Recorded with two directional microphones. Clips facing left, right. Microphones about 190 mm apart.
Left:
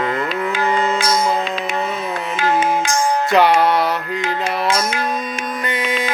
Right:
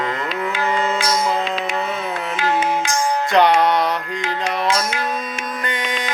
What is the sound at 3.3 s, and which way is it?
Music, 5° left (ahead or behind).